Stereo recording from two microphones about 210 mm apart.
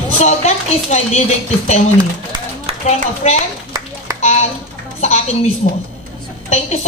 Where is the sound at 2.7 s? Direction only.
30° right (ahead or behind).